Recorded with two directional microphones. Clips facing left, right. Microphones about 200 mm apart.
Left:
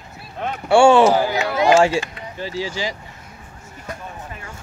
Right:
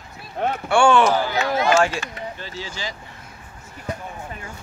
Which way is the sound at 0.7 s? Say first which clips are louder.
Left 5 dB; 25° left (ahead or behind).